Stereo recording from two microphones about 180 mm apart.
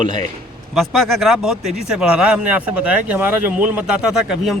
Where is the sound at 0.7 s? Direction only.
Centre (ahead or behind).